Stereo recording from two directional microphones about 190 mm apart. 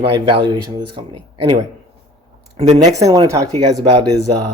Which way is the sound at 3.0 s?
15° right (ahead or behind).